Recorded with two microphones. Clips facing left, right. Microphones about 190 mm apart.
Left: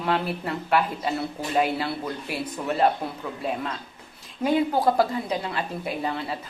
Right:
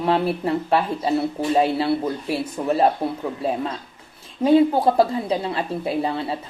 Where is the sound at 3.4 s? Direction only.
30° right (ahead or behind).